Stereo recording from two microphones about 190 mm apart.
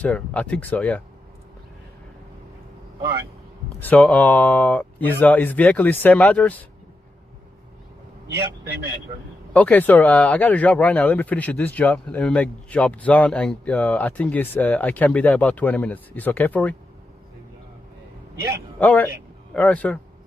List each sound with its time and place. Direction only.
0.0 s speech: 5° left (ahead or behind)
3.8 s speech: 10° left (ahead or behind)
8.4 s a man's voice: 60° right (ahead or behind)
9.5 s speech: 5° left (ahead or behind)
18.3 s a man's voice: 15° right (ahead or behind)
18.8 s speech: 10° left (ahead or behind)